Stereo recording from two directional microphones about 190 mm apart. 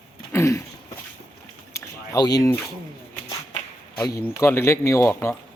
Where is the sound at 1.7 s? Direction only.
20° left (ahead or behind).